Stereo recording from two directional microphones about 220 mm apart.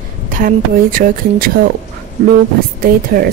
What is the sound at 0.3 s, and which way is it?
A woman's voice, 40° right (ahead or behind).